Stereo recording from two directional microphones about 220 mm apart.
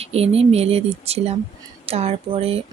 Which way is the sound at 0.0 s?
25° right (ahead or behind).